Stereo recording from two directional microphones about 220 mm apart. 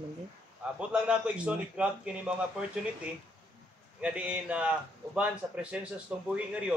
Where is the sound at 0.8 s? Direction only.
5° right (ahead or behind).